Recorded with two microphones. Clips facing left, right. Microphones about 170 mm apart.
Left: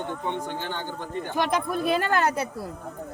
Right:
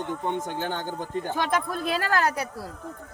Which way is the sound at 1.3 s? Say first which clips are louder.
Left 3 dB; 15° left (ahead or behind).